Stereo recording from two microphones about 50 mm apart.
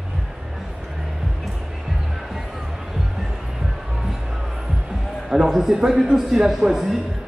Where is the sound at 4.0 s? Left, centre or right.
Centre.